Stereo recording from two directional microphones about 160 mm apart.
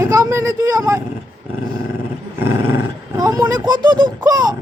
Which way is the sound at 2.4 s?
15° right (ahead or behind).